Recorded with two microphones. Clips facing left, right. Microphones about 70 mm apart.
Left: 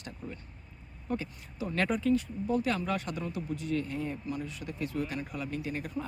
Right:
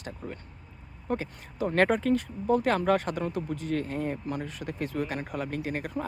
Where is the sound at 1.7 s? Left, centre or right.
Right.